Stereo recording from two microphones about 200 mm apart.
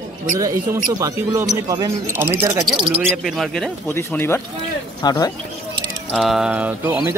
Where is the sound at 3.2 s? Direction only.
Centre (ahead or behind); by 5.3 s 15° left (ahead or behind).